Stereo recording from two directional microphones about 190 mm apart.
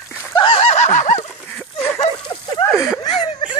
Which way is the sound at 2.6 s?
15° left (ahead or behind).